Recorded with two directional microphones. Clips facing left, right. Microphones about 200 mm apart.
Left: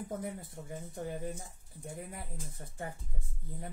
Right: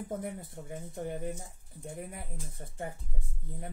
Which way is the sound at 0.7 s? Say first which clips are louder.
Right 2 dB; 25° right (ahead or behind).